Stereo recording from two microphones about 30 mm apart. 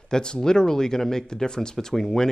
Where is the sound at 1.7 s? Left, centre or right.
Centre.